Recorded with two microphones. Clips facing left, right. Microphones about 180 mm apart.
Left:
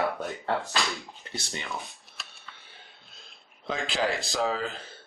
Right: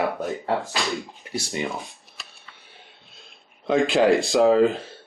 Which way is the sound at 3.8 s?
Centre (ahead or behind).